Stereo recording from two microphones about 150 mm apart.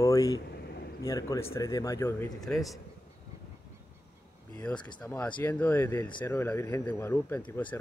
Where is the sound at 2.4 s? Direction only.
Centre (ahead or behind).